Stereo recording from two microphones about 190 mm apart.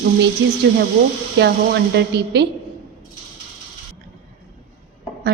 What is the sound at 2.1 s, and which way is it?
Speech, 60° right (ahead or behind).